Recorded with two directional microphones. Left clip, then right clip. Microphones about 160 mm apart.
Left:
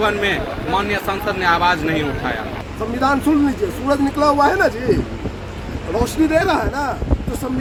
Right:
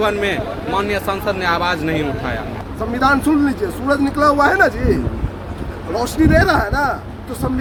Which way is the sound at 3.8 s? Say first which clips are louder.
Right 2 dB; 30° right (ahead or behind).